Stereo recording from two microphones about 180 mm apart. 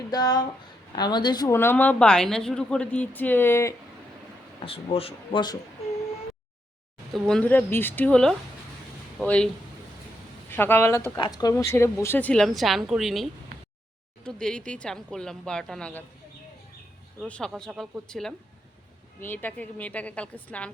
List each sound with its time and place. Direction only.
0.1 s a woman's voice: 20° left (ahead or behind)
4.6 s speech: 30° left (ahead or behind)
7.1 s a woman's voice: 5° left (ahead or behind)
10.5 s a woman's voice: 10° left (ahead or behind)
14.3 s a woman's voice: 5° left (ahead or behind)
17.2 s a woman's voice: 5° left (ahead or behind)